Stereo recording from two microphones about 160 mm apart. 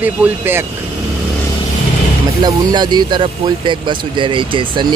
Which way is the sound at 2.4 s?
25° right (ahead or behind).